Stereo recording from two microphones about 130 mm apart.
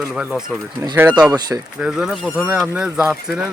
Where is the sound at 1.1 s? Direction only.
30° right (ahead or behind).